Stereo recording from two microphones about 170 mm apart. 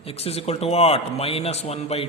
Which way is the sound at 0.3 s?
35° left (ahead or behind).